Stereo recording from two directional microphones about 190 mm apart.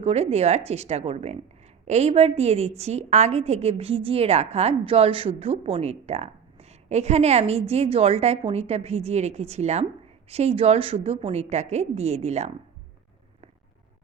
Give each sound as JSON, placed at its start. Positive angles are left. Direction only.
{"t": 0.0, "sound": "a woman's voice", "side_deg": -35}